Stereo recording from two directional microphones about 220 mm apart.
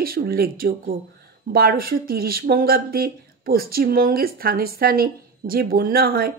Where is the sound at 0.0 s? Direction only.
45° right (ahead or behind).